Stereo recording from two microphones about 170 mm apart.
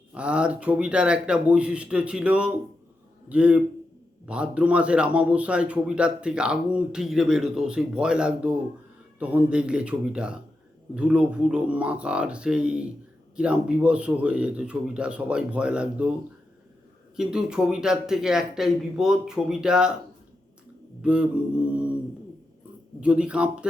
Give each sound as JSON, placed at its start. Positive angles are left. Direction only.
{"t": 0.1, "sound": "a man's voice", "side_deg": -5}
{"t": 17.2, "sound": "a man's voice", "side_deg": -5}
{"t": 21.0, "sound": "speech", "side_deg": -5}
{"t": 23.0, "sound": "speech", "side_deg": -5}